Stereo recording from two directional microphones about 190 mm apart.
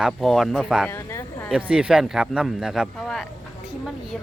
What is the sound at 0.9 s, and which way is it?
Speech, 15° left (ahead or behind).